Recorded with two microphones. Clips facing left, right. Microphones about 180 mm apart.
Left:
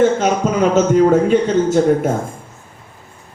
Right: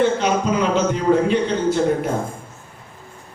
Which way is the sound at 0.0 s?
45° left (ahead or behind).